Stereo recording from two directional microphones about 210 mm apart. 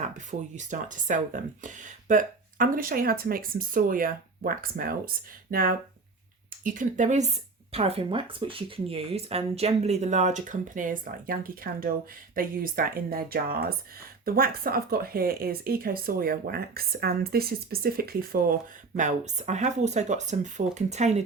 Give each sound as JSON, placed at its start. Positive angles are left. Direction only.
{"t": 0.0, "sound": "speech", "side_deg": -35}